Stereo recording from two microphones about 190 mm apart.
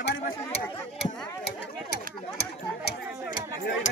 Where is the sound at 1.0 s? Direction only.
60° left (ahead or behind).